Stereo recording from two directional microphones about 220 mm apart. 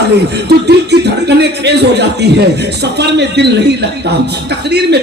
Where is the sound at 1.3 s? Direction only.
50° right (ahead or behind).